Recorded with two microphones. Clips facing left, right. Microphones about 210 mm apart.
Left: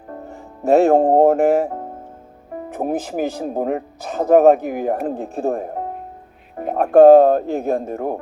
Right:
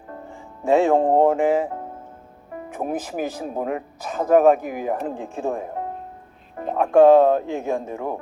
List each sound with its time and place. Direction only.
0.3 s speech: 40° left (ahead or behind)
2.8 s speech: 45° left (ahead or behind)